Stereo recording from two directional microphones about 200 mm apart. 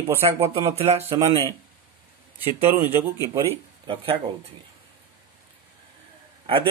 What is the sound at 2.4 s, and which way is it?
Speech, 10° right (ahead or behind).